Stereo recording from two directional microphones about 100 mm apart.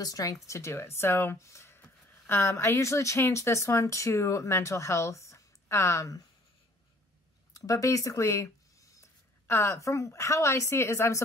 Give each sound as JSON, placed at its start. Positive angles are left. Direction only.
{"t": 0.0, "sound": "speech", "side_deg": 35}
{"t": 7.5, "sound": "speech", "side_deg": 35}